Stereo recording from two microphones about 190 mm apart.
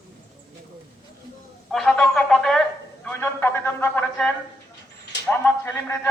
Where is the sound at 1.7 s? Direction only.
5° left (ahead or behind).